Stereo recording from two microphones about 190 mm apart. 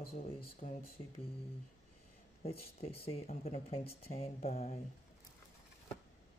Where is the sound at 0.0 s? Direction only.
50° left (ahead or behind).